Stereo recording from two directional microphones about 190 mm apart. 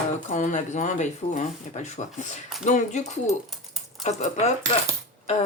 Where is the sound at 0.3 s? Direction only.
45° left (ahead or behind).